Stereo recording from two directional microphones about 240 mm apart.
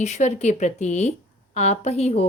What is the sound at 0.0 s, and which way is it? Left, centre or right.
Speech, left.